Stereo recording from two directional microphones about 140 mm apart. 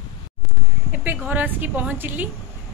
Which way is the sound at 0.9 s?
10° right (ahead or behind).